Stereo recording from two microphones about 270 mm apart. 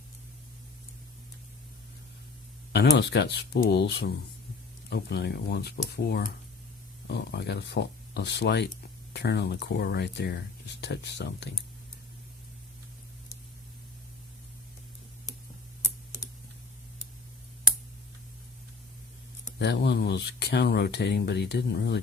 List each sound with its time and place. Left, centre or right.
2.7 s speech: left
19.5 s speech: left